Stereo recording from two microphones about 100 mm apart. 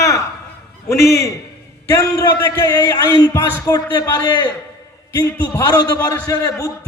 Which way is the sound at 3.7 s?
40° left (ahead or behind).